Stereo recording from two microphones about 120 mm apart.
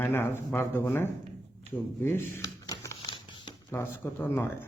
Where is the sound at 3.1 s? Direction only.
40° left (ahead or behind).